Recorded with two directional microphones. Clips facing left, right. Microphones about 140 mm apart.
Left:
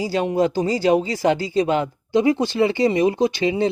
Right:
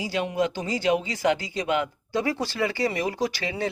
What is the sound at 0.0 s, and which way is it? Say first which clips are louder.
Speech: left 6 dB; 35° left (ahead or behind).